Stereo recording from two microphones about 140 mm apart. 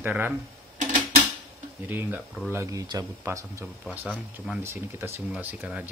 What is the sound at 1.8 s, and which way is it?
Speech, 15° right (ahead or behind).